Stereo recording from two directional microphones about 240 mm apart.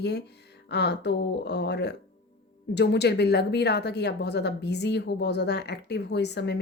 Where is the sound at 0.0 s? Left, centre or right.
Left.